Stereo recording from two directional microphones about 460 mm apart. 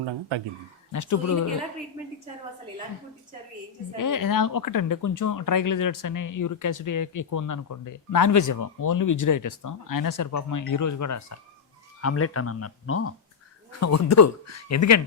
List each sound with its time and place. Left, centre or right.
0.0 s speech: right
0.9 s speech: left
3.9 s speech: left